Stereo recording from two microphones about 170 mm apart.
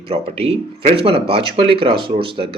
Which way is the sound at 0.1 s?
35° right (ahead or behind).